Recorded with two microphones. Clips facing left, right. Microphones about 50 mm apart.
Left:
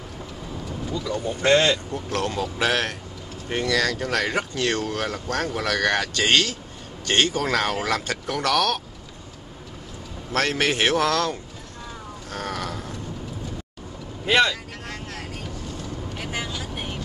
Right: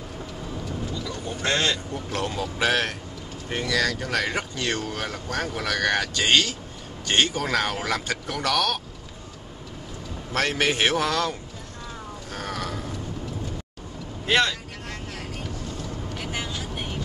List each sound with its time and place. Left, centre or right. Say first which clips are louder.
1.4 s speech: left 6 dB; left
2.0 s speech: left 2 dB; centre
10.3 s speech: left 1 dB; centre
12.3 s boat: left 2 dB; centre
14.2 s vehicle: left 2 dB; centre
16.7 s vehicle: even; centre